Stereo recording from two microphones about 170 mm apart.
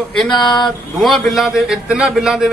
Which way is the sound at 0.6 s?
Centre (ahead or behind).